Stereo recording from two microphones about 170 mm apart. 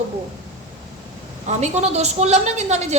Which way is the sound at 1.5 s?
40° right (ahead or behind).